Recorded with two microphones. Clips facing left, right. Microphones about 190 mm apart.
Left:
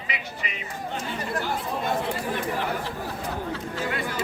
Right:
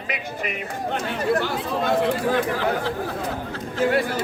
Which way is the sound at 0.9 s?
75° right (ahead or behind).